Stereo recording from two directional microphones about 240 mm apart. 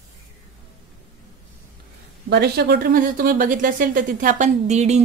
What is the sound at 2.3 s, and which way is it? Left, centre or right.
Speech, right.